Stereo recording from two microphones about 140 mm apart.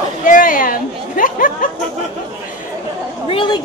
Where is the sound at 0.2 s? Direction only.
75° left (ahead or behind).